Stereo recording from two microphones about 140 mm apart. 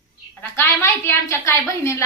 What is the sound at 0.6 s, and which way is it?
A woman's voice, 15° left (ahead or behind).